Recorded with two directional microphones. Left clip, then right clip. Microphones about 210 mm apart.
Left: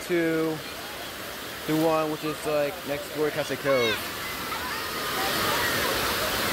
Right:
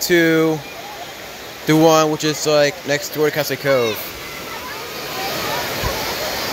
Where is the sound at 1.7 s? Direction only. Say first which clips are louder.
Right 11 dB; 25° right (ahead or behind).